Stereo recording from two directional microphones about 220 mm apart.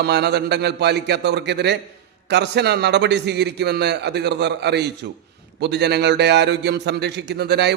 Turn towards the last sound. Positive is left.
turn(degrees=-50)  # may be behind; listen again after turning